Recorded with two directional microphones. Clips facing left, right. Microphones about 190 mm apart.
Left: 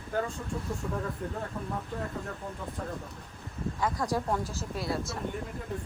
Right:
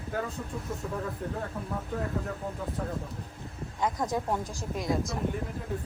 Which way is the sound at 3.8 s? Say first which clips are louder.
Right 1 dB; 20° right (ahead or behind).